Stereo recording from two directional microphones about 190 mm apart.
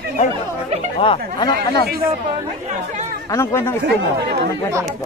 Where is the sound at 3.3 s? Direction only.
15° left (ahead or behind).